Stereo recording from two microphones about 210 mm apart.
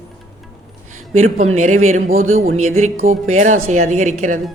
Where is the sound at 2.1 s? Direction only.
75° right (ahead or behind).